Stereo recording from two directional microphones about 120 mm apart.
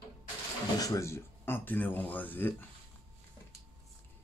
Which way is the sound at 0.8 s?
25° left (ahead or behind).